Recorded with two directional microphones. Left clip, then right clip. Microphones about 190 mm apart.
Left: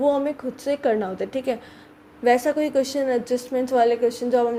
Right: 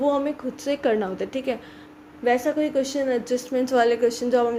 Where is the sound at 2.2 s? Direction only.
20° left (ahead or behind).